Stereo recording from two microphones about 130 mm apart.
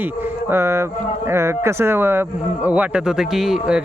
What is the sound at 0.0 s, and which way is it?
Speech, 15° right (ahead or behind).